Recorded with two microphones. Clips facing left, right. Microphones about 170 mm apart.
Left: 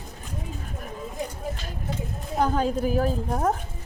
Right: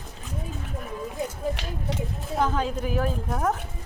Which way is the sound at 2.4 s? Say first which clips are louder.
Left 2 dB; 40° left (ahead or behind).